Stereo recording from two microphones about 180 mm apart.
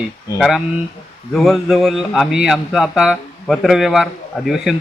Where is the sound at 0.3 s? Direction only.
Centre (ahead or behind).